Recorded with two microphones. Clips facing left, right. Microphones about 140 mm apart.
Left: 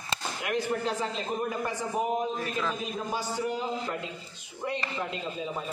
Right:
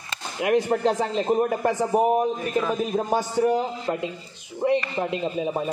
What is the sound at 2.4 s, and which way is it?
Speech, 15° right (ahead or behind).